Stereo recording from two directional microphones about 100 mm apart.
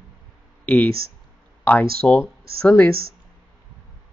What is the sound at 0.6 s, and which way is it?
Speech, 15° left (ahead or behind).